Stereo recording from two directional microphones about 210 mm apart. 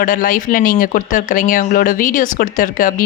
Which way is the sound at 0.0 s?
40° left (ahead or behind).